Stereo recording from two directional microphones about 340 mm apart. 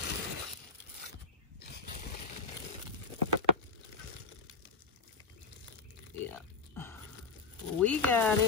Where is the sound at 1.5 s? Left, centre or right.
Left.